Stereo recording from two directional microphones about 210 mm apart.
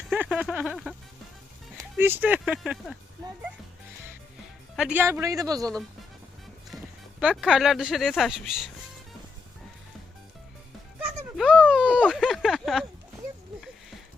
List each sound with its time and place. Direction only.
0.1 s music: 5° right (ahead or behind)
1.8 s speech: 10° right (ahead or behind)
4.8 s speech: 5° right (ahead or behind)
6.7 s speech: 5° right (ahead or behind)
11.0 s a sound: centre (ahead or behind)